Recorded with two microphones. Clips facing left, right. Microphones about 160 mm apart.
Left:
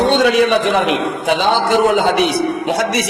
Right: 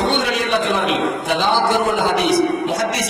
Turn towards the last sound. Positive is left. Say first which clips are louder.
# left 2 dB
turn(degrees=80)